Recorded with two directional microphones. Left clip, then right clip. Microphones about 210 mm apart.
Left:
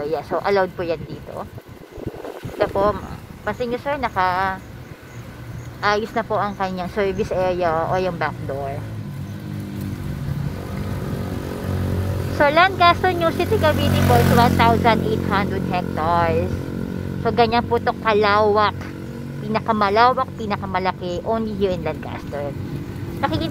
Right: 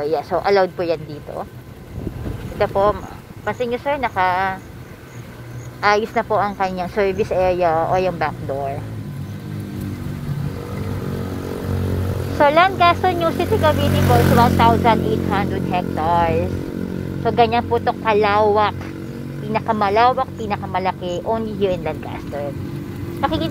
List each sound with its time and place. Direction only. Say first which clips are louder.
0.0 s speech: right 3 dB; 5° left (ahead or behind)
2.6 s a woman's voice: right 2 dB; 10° left (ahead or behind)
5.8 s a woman's voice: right 3 dB; centre (ahead or behind)
12.4 s a woman's voice: right 1 dB; 15° left (ahead or behind)